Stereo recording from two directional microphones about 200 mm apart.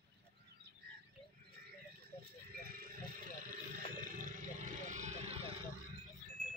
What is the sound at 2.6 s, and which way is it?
Vehicle, 45° right (ahead or behind).